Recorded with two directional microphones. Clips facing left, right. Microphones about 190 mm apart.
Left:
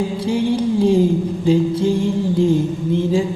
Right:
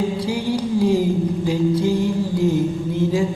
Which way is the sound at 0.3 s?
25° left (ahead or behind).